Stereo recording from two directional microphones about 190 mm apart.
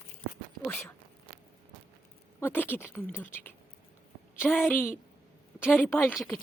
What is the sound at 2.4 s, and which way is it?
A woman's voice, 10° left (ahead or behind).